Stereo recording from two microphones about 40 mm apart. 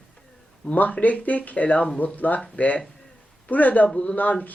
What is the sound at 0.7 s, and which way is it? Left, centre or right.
Speech, left.